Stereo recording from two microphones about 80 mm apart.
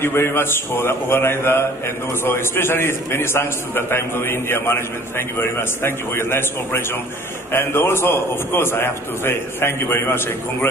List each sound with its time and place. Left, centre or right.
0.0 s a man's voice: left